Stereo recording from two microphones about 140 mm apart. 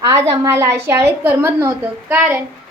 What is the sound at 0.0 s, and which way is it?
A woman's voice, 20° right (ahead or behind).